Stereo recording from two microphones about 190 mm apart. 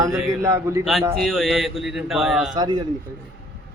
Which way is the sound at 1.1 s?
Centre (ahead or behind).